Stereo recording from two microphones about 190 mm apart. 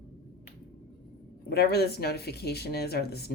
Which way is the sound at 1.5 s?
55° left (ahead or behind).